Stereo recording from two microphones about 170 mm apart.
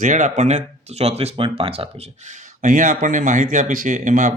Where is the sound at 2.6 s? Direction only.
50° right (ahead or behind).